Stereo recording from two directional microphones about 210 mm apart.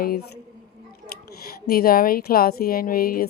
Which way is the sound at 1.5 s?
45° left (ahead or behind).